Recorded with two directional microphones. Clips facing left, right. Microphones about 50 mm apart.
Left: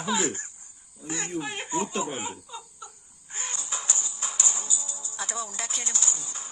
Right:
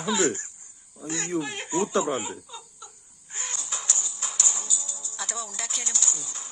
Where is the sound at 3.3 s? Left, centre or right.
Left.